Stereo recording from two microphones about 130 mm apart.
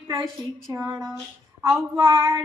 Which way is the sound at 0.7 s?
25° right (ahead or behind).